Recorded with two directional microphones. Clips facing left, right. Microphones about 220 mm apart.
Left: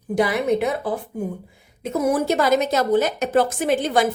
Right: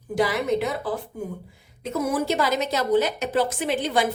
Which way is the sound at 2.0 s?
50° left (ahead or behind).